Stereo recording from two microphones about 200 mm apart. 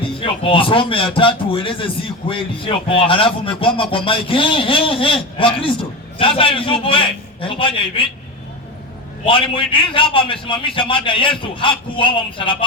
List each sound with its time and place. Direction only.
0.2 s a man's voice: 25° left (ahead or behind)
9.2 s a man's voice: 25° left (ahead or behind)